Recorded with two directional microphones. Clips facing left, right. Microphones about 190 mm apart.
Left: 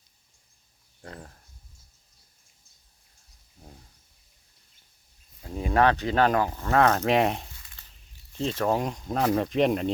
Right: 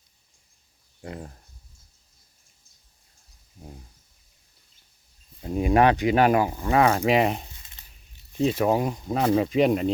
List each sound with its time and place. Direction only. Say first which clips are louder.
1.0 s speech: right 6 dB; 15° right (ahead or behind)
5.4 s speech: right 3 dB; 15° right (ahead or behind); by 7.4 s centre (ahead or behind)
7.6 s a sound: right 1 dB; 20° right (ahead or behind)
8.3 s speech: right 4 dB; 15° right (ahead or behind)